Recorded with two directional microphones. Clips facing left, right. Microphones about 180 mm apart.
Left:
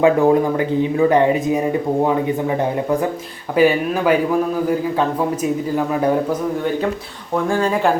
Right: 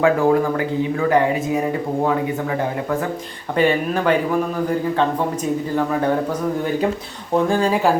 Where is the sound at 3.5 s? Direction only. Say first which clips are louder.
Left 3 dB; 5° left (ahead or behind).